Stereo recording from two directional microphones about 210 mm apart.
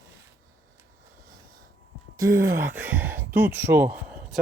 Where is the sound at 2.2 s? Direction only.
15° right (ahead or behind).